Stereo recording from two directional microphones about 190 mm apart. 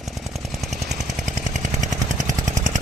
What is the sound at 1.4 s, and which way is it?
Chainsaw, 40° right (ahead or behind).